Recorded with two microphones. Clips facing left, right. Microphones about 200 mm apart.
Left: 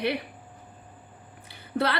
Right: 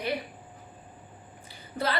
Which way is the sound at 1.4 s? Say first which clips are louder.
Left 4 dB; 70° left (ahead or behind).